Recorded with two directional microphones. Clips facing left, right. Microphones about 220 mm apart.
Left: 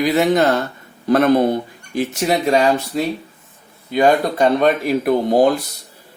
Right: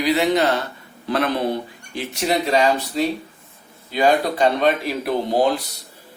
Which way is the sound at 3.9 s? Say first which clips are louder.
Left 3 dB; 50° left (ahead or behind).